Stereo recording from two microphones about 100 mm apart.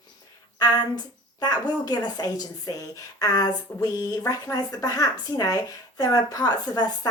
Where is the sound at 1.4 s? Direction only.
40° left (ahead or behind).